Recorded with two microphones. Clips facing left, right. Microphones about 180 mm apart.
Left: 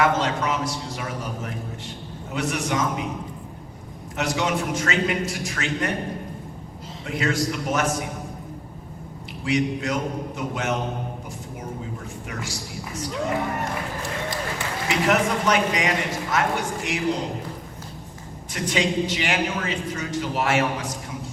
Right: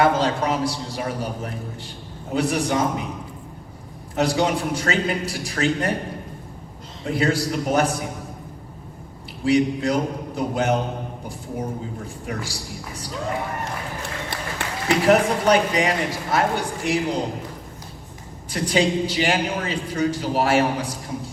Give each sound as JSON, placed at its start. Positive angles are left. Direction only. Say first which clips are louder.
{"t": 0.0, "sound": "a woman's voice", "louder": "right 3 dB", "side_deg": -35}
{"t": 4.1, "sound": "a woman's voice", "louder": "right 4 dB", "side_deg": -35}
{"t": 7.0, "sound": "a woman's voice", "louder": "right 3 dB", "side_deg": -35}
{"t": 9.4, "sound": "a woman's voice", "louder": "right 5 dB", "side_deg": -35}
{"t": 12.3, "sound": "a woman's voice", "louder": "right 3 dB", "side_deg": -35}
{"t": 14.8, "sound": "a woman's voice", "louder": "right 5 dB", "side_deg": -35}
{"t": 18.5, "sound": "a woman's voice", "louder": "right 3 dB", "side_deg": -35}